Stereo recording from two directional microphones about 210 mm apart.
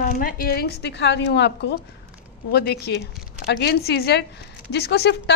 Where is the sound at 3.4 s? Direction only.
50° left (ahead or behind).